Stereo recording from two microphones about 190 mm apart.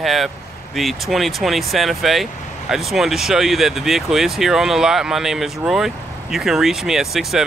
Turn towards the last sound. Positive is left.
turn(degrees=0)  # may be behind; listen again after turning